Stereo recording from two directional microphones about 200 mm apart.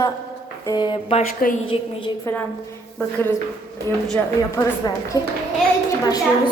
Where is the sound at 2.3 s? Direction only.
10° left (ahead or behind).